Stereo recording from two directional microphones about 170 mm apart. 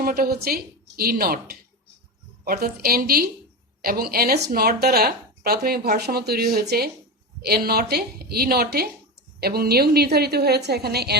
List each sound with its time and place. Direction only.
0.0 s a woman's voice: 65° right (ahead or behind)